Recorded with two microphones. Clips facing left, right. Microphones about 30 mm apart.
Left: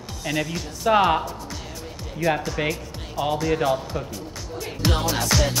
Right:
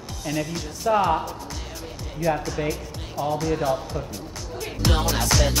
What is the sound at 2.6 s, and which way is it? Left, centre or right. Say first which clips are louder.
Speech: left 1 dB; left.